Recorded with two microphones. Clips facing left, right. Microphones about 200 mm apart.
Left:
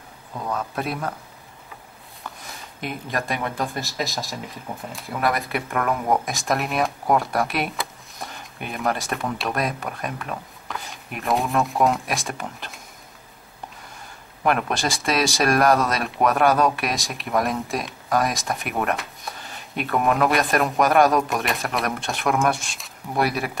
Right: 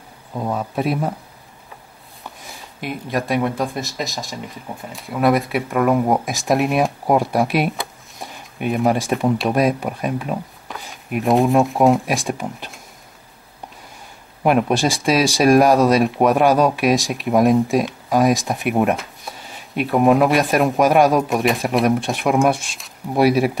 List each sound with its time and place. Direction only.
0.3 s a man's voice: 20° right (ahead or behind)
2.4 s speech: centre (ahead or behind)
14.5 s speech: centre (ahead or behind)